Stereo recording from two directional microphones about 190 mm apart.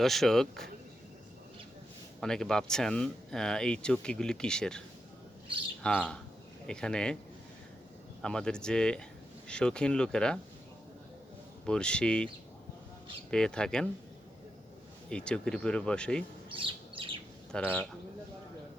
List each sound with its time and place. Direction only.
0.0 s speech: centre (ahead or behind)
2.2 s speech: 5° left (ahead or behind)
5.8 s speech: 5° left (ahead or behind)
8.2 s speech: 5° left (ahead or behind)
11.6 s speech: 5° left (ahead or behind)
13.3 s speech: 5° left (ahead or behind)
15.1 s speech: 5° left (ahead or behind)
16.5 s bird: 25° right (ahead or behind)
17.5 s speech: 5° left (ahead or behind)